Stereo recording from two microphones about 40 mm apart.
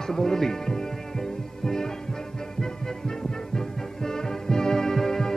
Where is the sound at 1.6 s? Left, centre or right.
Centre.